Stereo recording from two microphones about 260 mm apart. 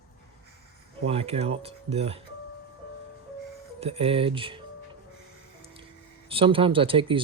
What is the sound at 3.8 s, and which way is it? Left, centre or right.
Speech, right.